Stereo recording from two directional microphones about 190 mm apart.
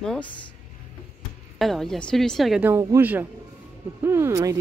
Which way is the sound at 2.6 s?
15° right (ahead or behind).